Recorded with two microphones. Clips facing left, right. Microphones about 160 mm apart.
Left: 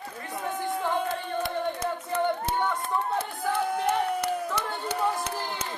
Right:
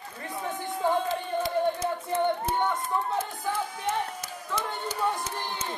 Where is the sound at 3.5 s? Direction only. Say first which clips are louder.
Left 5 dB; 65° left (ahead or behind).